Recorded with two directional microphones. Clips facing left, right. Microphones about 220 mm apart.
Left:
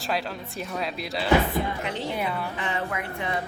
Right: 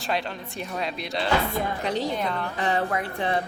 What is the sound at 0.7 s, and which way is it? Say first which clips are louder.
Speech: right 1 dB; centre (ahead or behind).